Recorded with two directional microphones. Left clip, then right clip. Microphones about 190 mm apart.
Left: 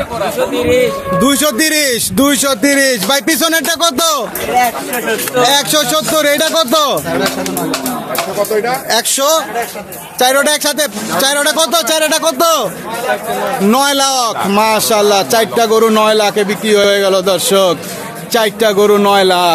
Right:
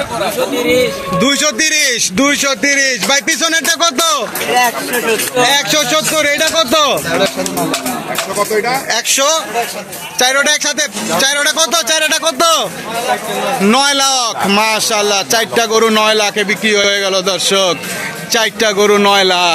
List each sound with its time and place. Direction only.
1.2 s speech: 20° left (ahead or behind)
5.4 s speech: 40° left (ahead or behind)
8.9 s a man's voice: 30° left (ahead or behind); by 12.6 s 10° left (ahead or behind)
13.7 s a man's voice: 10° left (ahead or behind)